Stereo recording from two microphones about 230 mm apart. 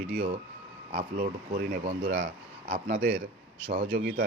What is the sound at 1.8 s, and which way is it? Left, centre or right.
Speech, right.